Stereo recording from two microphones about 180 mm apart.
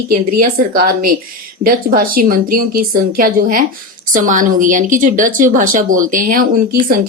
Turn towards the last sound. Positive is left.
turn(degrees=-50)  # may be behind; listen again after turning